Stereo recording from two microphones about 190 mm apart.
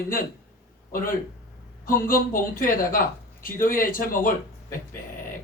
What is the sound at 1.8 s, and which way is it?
A man's voice, 45° left (ahead or behind).